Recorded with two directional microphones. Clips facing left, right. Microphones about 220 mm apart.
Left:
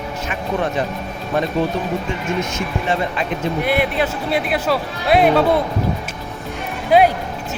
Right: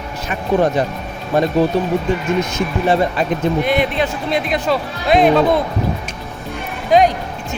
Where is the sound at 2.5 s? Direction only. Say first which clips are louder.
Right 5 dB; 40° right (ahead or behind).